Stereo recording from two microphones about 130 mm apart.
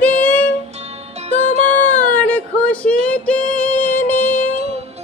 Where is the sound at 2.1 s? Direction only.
10° left (ahead or behind).